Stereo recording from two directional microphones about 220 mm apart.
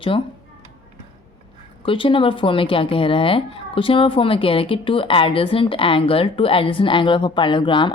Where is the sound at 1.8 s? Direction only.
25° left (ahead or behind).